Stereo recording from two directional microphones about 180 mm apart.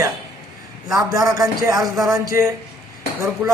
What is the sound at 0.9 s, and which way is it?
A man's voice, 20° right (ahead or behind).